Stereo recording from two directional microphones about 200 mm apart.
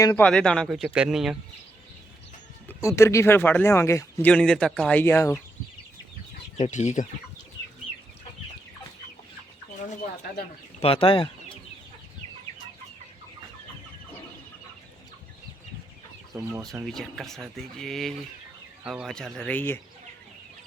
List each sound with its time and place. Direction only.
0.0 s speech: 10° left (ahead or behind)
2.6 s speech: 15° left (ahead or behind)
6.6 s speech: 35° left (ahead or behind)
10.8 s speech: 30° left (ahead or behind)
16.3 s speech: 15° right (ahead or behind)
16.8 s speech: centre (ahead or behind)